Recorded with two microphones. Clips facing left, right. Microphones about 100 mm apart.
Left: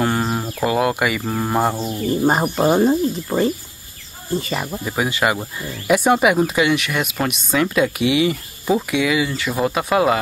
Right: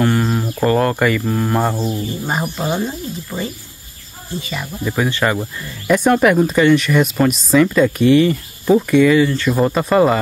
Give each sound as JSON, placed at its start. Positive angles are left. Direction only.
{"t": 0.0, "sound": "a sound", "side_deg": 15}
{"t": 0.7, "sound": "speech", "side_deg": 10}
{"t": 2.2, "sound": "speech", "side_deg": 40}
{"t": 4.8, "sound": "speech", "side_deg": 10}